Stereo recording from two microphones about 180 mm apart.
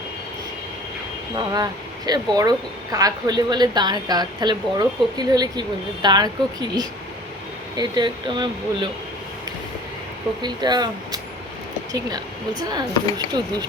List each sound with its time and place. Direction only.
1.5 s speech: 20° right (ahead or behind)
10.4 s speech: 25° right (ahead or behind)